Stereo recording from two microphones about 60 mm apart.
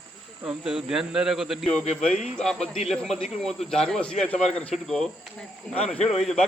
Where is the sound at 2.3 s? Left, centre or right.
Centre.